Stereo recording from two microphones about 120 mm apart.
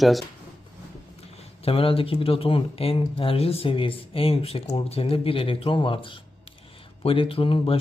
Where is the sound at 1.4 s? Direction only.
50° left (ahead or behind).